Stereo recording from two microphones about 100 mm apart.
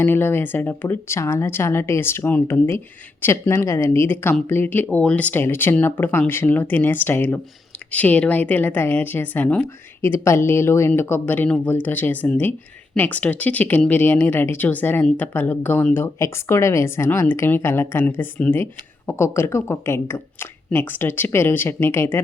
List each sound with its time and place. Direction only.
0.0 s speech: 20° left (ahead or behind)
10.0 s speech: 25° left (ahead or behind)